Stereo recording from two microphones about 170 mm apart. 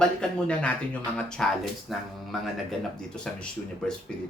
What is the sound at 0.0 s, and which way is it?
Speech, 5° left (ahead or behind).